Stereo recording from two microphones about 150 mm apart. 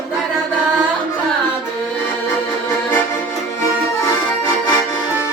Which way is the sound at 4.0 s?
15° left (ahead or behind).